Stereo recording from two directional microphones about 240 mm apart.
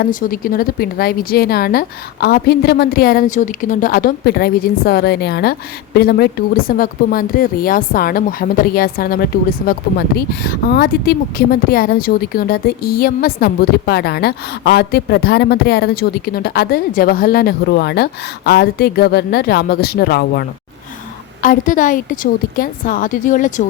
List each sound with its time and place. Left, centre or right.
0.0 s speech: left
21.4 s speech: left